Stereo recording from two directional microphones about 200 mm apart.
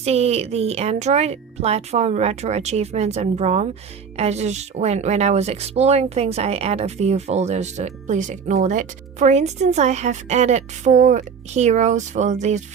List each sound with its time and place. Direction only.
0.0 s speech: 30° right (ahead or behind)